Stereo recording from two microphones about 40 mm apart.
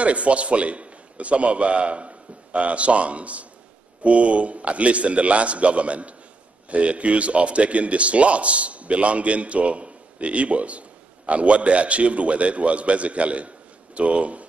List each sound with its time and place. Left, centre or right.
0.0 s a man's voice: right